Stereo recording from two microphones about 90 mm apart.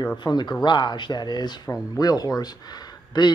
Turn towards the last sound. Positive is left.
turn(degrees=50)  # may be behind; listen again after turning